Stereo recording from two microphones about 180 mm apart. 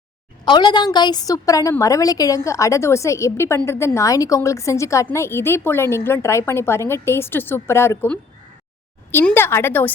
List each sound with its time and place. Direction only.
0.4 s a woman's voice: 25° left (ahead or behind)